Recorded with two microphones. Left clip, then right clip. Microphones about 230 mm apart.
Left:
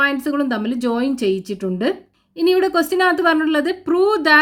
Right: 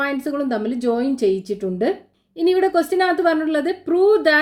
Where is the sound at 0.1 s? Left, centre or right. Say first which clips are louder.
Left 2 dB; left.